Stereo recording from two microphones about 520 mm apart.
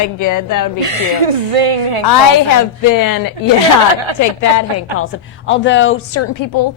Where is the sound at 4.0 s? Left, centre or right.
Right.